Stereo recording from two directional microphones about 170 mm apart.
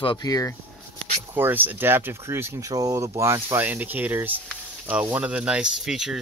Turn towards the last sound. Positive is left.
turn(degrees=-5)  # may be behind; listen again after turning